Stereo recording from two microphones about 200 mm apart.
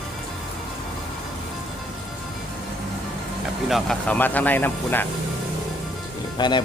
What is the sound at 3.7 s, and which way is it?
Speech, 5° left (ahead or behind).